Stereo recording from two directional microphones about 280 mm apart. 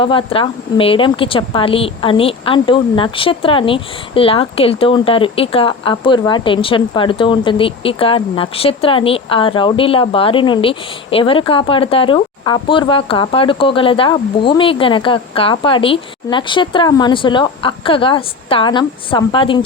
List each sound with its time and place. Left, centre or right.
0.0 s speech: centre